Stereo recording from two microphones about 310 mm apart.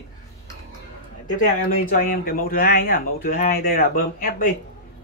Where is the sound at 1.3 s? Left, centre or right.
Left.